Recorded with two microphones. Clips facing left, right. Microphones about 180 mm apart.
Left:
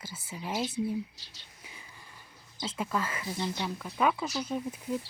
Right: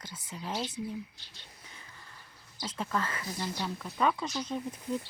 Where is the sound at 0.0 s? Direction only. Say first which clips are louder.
Left 1 dB; 5° left (ahead or behind).